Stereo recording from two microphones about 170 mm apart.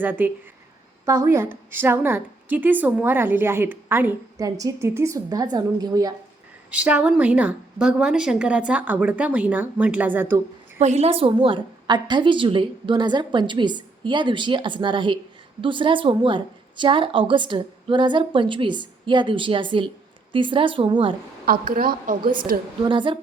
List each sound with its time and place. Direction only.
0.0 s a woman's voice: 10° right (ahead or behind)
6.7 s a woman's voice: 5° right (ahead or behind)
10.8 s a woman's voice: 40° right (ahead or behind)
21.4 s a woman's voice: 55° right (ahead or behind)
22.8 s a woman's voice: 30° right (ahead or behind)